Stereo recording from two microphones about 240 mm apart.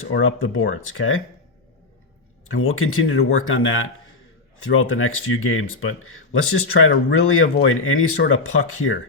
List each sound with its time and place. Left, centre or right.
0.1 s speech: left
2.5 s speech: left